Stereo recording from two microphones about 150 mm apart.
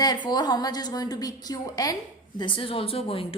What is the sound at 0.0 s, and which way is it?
A woman's voice, 30° left (ahead or behind).